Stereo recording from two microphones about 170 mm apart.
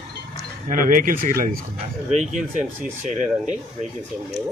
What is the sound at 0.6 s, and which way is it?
Speech, 55° right (ahead or behind).